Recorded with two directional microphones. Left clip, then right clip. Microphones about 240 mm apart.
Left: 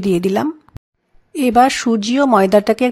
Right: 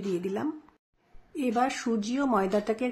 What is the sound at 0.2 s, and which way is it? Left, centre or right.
Speech, left.